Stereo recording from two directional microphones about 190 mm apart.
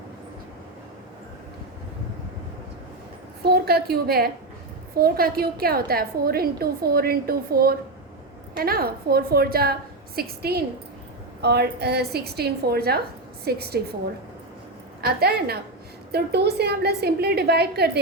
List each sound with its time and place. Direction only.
3.4 s a woman's voice: 55° right (ahead or behind)
15.0 s a woman's voice: 55° right (ahead or behind)